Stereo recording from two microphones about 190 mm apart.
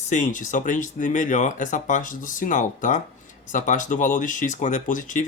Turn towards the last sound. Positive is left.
turn(degrees=45)  # may be behind; listen again after turning